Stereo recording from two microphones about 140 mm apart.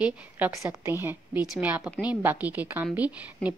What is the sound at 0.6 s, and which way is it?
A woman's voice, 20° right (ahead or behind).